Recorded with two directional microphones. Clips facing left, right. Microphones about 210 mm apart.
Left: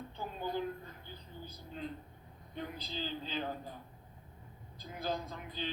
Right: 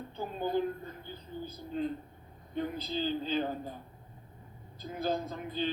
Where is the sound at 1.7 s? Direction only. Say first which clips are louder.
Right 9 dB; 45° right (ahead or behind).